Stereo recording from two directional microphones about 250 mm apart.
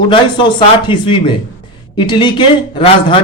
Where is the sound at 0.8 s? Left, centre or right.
Centre.